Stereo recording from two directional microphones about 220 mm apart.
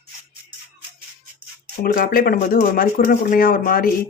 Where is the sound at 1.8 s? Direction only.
40° left (ahead or behind).